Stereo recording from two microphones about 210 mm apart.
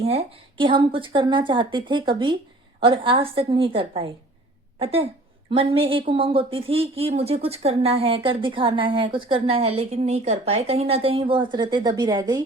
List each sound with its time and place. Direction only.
0.0 s speech: 25° right (ahead or behind)